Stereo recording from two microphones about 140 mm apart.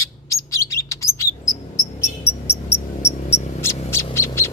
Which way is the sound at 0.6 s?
20° left (ahead or behind).